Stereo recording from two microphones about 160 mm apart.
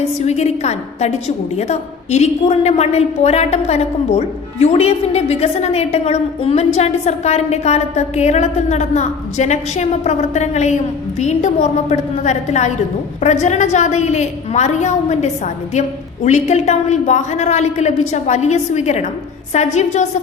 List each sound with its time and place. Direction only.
0.0 s a woman's voice: 40° left (ahead or behind)